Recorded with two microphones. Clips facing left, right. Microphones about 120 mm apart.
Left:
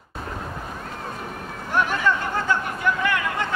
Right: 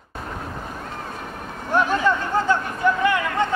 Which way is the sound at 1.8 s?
25° right (ahead or behind).